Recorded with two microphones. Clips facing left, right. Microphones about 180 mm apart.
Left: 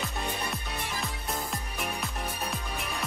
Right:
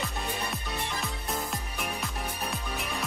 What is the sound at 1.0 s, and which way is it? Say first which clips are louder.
Music: right 1 dB; centre (ahead or behind).